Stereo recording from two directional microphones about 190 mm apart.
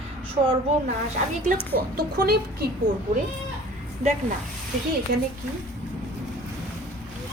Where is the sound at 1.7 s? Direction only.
55° right (ahead or behind).